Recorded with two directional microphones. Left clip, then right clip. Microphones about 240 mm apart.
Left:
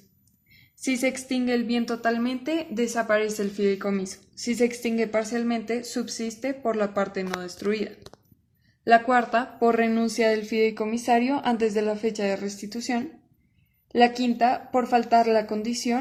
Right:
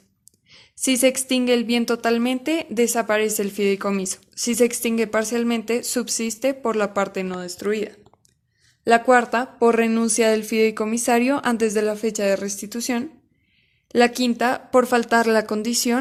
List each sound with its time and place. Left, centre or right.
0.8 s speech: right